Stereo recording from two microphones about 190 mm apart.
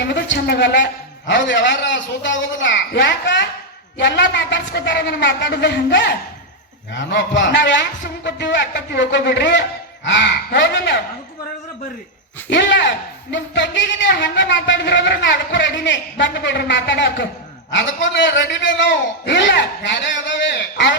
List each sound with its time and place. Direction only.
0.1 s a man's voice: 65° left (ahead or behind)
12.5 s a man's voice: 70° left (ahead or behind)